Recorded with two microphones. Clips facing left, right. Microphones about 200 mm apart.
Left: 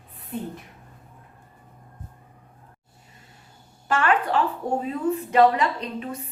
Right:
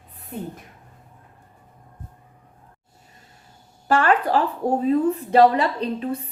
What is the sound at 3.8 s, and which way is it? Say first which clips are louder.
A woman's voice: right 3 dB; 35° right (ahead or behind).